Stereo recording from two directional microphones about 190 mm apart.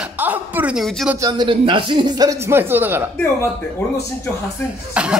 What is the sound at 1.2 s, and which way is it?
Speech, 25° right (ahead or behind).